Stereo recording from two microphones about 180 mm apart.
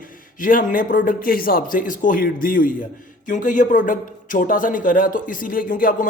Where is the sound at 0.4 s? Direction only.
50° left (ahead or behind).